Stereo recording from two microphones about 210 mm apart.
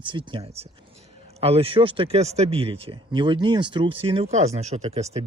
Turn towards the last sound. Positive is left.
turn(degrees=-30)  # may be behind; listen again after turning